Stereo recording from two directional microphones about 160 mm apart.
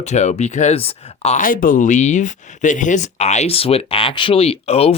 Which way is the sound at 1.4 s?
60° left (ahead or behind).